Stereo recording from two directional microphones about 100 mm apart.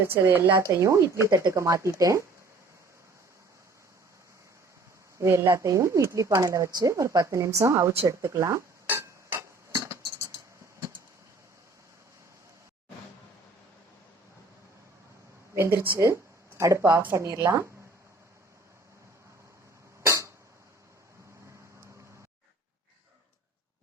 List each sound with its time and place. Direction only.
0.0 s speech: 20° right (ahead or behind)
5.1 s speech: 30° right (ahead or behind)
8.0 s dishes: 30° right (ahead or behind)
15.5 s speech: 25° right (ahead or behind)
20.0 s cough: 30° right (ahead or behind)